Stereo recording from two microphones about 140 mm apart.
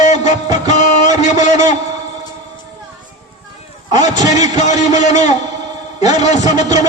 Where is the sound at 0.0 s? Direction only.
60° left (ahead or behind).